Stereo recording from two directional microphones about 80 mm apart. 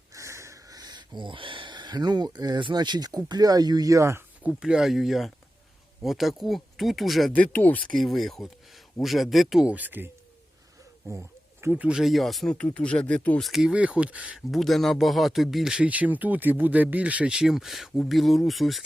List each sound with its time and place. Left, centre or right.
0.1 s speech: right
4.4 s speech: centre
7.3 s speech: left
7.9 s speech: centre
9.6 s speech: right
11.1 s a sound: right
11.7 s speech: centre
11.9 s speech: centre
12.5 s speech: centre
13.4 s speech: centre
14.3 s speech: centre